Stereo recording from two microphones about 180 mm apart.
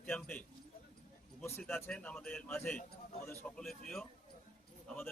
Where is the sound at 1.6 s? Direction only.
5° left (ahead or behind).